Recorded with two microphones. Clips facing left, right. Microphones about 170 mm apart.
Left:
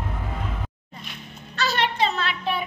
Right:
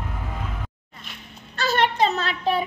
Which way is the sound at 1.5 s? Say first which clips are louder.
Right 3 dB; 50° right (ahead or behind).